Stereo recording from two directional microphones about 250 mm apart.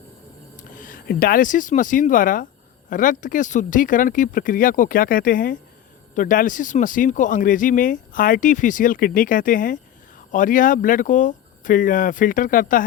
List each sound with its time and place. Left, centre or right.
0.5 s speech: left